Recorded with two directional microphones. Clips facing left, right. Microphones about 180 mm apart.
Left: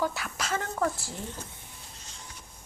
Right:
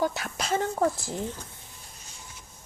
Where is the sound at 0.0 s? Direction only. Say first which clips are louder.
Right 3 dB; 20° right (ahead or behind).